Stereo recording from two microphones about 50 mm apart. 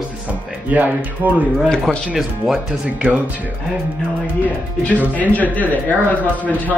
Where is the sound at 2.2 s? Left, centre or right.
Centre.